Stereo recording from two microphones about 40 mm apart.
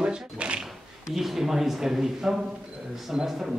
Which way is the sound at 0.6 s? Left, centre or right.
Centre.